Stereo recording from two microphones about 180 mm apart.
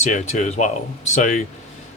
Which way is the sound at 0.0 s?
40° left (ahead or behind).